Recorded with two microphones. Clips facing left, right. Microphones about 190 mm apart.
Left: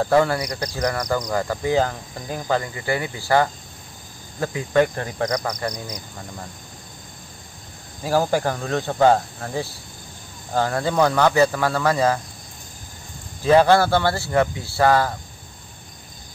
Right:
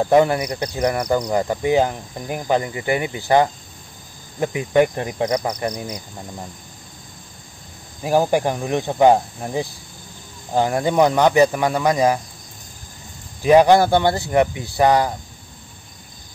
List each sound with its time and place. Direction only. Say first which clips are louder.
0.0 s speech: right 3 dB; 20° right (ahead or behind)
8.0 s speech: right 3 dB; 20° right (ahead or behind)
13.4 s speech: right 3 dB; 15° right (ahead or behind)